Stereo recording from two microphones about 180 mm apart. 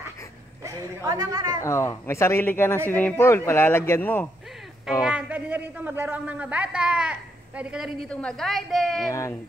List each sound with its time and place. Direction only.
0.7 s speech: 20° right (ahead or behind)
1.6 s speech: 15° left (ahead or behind)
5.0 s a man's voice: 5° right (ahead or behind)